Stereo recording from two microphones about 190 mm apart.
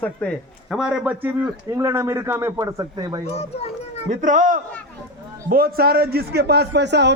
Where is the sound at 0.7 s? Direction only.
5° right (ahead or behind); by 3.2 s 20° right (ahead or behind).